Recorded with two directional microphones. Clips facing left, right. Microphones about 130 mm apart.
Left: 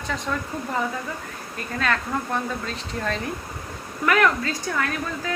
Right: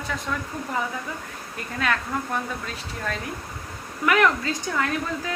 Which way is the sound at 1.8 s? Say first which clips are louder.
Left 1 dB; 15° right (ahead or behind).